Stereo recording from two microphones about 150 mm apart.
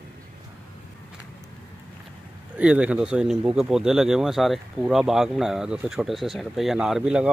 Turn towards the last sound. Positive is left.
turn(degrees=-5)  # may be behind; listen again after turning